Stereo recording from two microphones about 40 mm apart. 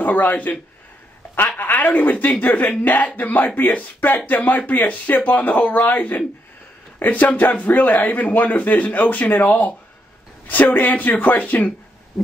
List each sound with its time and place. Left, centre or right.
0.0 s a man's voice: left
1.7 s a man's voice: left